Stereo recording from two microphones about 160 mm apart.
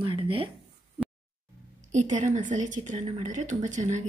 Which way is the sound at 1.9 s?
50° right (ahead or behind).